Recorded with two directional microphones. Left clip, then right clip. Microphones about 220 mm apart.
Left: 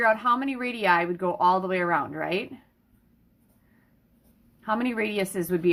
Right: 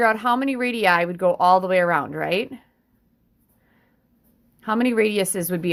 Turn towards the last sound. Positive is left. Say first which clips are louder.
# right 3 dB
turn(degrees=-45)  # may be behind; listen again after turning